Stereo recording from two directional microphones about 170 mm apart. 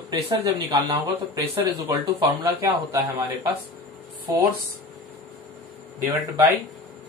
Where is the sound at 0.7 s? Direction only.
25° right (ahead or behind).